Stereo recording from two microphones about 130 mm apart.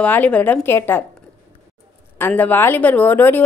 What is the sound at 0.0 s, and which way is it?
A woman's voice, 10° left (ahead or behind).